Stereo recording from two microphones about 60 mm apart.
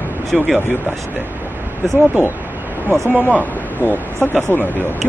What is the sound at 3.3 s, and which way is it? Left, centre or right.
Speech, left.